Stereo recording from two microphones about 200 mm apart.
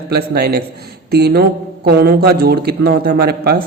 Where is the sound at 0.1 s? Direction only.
50° right (ahead or behind).